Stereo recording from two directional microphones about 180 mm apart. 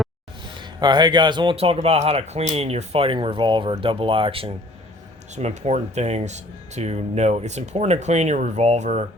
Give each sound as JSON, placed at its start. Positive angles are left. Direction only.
{"t": 0.5, "sound": "speech", "side_deg": -25}